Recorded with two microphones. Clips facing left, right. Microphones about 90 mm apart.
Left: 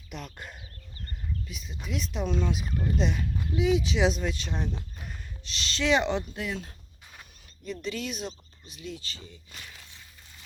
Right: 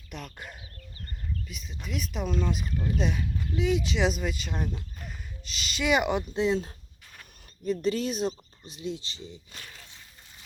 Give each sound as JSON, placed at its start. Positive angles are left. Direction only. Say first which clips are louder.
{"t": 0.1, "sound": "speech", "louder": "even", "side_deg": 0}
{"t": 6.3, "sound": "speech", "louder": "right 8 dB", "side_deg": -25}